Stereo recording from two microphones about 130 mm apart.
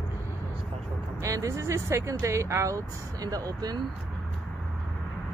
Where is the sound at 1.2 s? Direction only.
25° right (ahead or behind).